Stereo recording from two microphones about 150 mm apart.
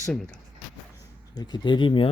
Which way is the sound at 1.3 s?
30° left (ahead or behind).